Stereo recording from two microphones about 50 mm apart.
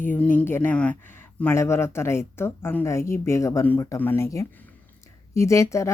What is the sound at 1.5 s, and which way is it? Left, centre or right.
Speech, left.